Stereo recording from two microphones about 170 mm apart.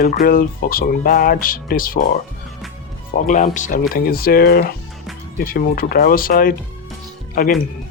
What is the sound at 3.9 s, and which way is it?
Speech, 60° left (ahead or behind).